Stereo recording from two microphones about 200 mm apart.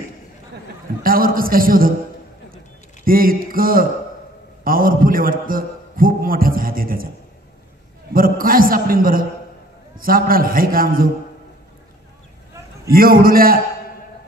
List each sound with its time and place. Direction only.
1.0 s a man's voice: 45° right (ahead or behind)
3.1 s a man's voice: 45° right (ahead or behind)
8.1 s a man's voice: 45° right (ahead or behind)
12.8 s a man's voice: 45° right (ahead or behind)